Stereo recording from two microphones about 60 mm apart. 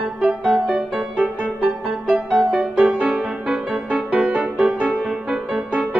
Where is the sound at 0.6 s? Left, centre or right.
Centre.